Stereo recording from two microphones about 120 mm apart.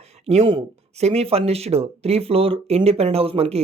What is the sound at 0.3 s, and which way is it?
Speech, 60° right (ahead or behind).